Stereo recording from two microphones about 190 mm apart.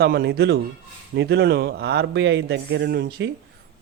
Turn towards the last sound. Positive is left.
turn(degrees=-60)  # may be behind; listen again after turning